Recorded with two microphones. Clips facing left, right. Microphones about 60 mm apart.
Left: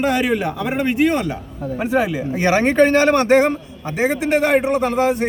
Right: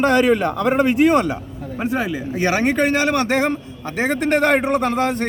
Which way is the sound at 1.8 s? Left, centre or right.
Centre.